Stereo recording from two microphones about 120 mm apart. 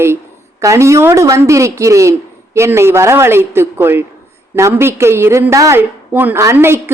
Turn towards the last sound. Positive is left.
turn(degrees=-20)  # may be behind; listen again after turning